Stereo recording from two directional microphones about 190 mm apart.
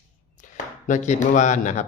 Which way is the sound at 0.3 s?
40° left (ahead or behind).